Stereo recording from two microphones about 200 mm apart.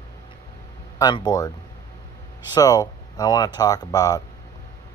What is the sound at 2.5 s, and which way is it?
Speech, 20° left (ahead or behind).